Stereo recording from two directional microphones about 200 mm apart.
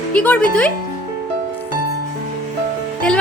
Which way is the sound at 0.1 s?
5° left (ahead or behind).